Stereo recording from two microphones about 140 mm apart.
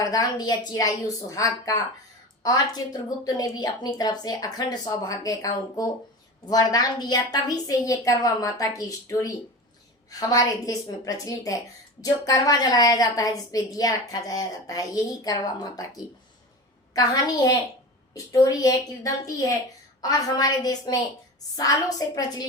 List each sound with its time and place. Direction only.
0.0 s a woman's voice: 25° left (ahead or behind)
16.9 s a woman's voice: 25° left (ahead or behind)